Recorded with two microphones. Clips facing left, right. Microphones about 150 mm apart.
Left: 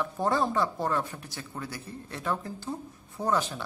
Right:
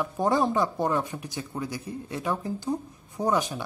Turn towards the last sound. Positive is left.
turn(degrees=-15)  # may be behind; listen again after turning